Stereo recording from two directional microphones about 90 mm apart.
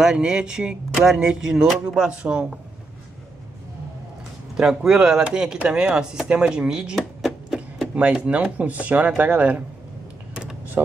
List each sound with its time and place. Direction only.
0.0 s speech: 5° right (ahead or behind)
4.6 s speech: 5° right (ahead or behind)
7.0 s a sound: centre (ahead or behind)
7.9 s speech: 10° right (ahead or behind)